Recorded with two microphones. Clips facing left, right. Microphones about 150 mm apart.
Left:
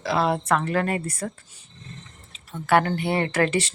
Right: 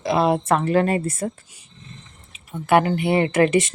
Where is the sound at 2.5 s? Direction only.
15° right (ahead or behind).